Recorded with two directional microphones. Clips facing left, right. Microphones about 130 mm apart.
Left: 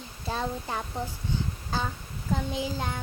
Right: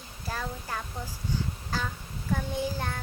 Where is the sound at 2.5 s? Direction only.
15° left (ahead or behind).